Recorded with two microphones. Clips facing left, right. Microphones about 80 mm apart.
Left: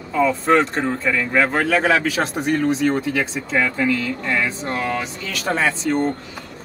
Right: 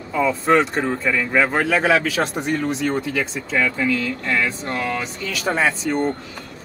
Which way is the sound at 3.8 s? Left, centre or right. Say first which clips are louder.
Left 1 dB; left.